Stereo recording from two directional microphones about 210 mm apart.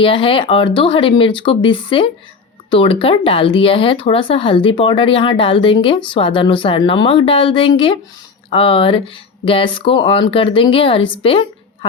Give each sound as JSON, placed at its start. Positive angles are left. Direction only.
{"t": 0.0, "sound": "speech", "side_deg": 25}